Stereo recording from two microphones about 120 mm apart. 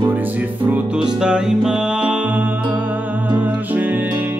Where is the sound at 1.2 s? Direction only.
5° right (ahead or behind).